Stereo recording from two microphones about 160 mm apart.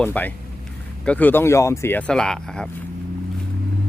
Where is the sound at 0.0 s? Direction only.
10° left (ahead or behind).